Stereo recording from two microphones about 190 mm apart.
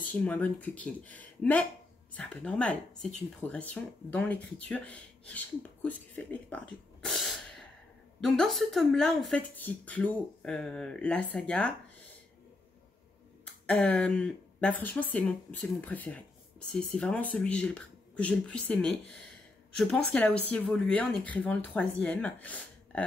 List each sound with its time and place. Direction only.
0.1 s speech: 10° left (ahead or behind)
13.7 s speech: 5° left (ahead or behind)